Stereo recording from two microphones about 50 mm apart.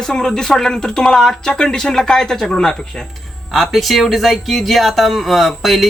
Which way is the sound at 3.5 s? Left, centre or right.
Centre.